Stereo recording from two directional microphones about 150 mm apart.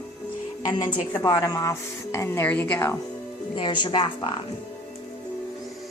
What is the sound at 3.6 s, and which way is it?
Speech, 30° left (ahead or behind).